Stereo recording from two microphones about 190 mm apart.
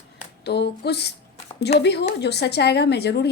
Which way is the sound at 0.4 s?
60° left (ahead or behind).